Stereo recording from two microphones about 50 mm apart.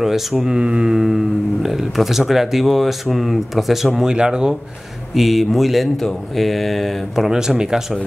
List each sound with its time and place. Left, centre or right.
0.0 s speech: centre
4.1 s speech: centre
5.1 s speech: centre
7.2 s speech: centre